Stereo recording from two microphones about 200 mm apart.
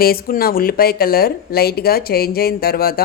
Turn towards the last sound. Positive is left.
turn(degrees=50)  # may be behind; listen again after turning